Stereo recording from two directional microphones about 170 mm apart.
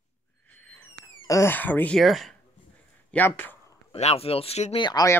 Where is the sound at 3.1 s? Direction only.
10° left (ahead or behind).